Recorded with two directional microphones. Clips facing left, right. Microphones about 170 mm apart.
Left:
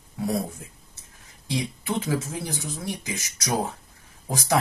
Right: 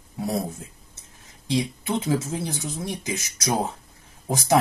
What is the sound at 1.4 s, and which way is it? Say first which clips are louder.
Speech: right 3 dB; 20° right (ahead or behind).